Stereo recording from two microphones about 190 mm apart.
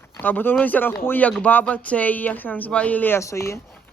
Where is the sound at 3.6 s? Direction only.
10° left (ahead or behind).